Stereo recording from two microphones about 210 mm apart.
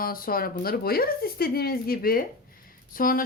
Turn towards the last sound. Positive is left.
turn(degrees=40)  # may be behind; listen again after turning